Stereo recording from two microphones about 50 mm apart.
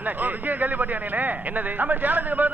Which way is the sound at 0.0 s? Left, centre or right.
Right.